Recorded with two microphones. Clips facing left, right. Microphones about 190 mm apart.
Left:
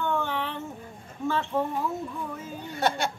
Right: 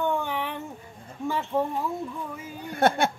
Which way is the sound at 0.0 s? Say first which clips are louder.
Right 1 dB; 15° right (ahead or behind).